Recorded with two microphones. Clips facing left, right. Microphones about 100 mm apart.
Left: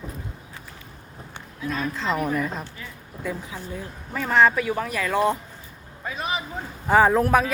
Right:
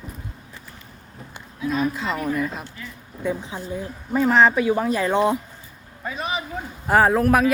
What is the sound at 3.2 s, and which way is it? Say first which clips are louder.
Speech: right 5 dB; 25° right (ahead or behind).